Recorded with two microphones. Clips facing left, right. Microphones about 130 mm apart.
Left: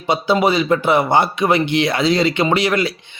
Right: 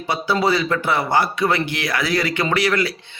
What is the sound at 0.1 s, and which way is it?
A man's voice, 20° left (ahead or behind).